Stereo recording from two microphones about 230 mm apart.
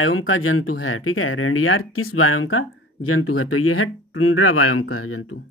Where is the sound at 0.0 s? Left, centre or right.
Left.